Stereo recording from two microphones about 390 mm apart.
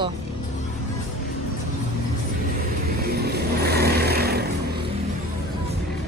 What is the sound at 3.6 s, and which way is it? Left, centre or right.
Vehicle, right.